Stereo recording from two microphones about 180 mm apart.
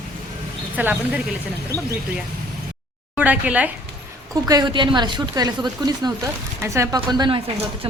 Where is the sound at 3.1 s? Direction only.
10° right (ahead or behind).